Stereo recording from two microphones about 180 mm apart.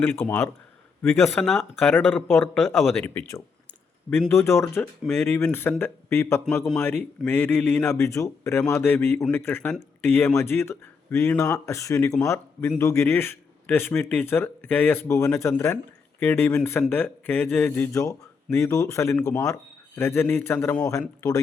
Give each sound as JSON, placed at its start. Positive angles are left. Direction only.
{"t": 0.0, "sound": "speech", "side_deg": 10}